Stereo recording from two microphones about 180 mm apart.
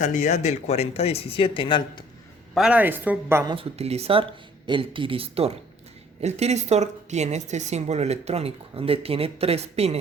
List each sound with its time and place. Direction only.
0.0 s speech: 40° left (ahead or behind); by 2.0 s 25° left (ahead or behind)
2.6 s a woman's voice: 5° right (ahead or behind)
3.5 s a woman's voice: 35° right (ahead or behind)